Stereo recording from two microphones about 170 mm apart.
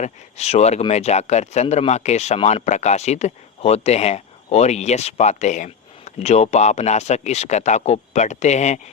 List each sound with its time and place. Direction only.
0.0 s speech: 40° left (ahead or behind)